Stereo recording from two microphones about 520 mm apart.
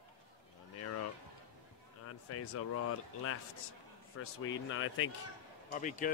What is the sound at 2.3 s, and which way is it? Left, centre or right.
Speech, left.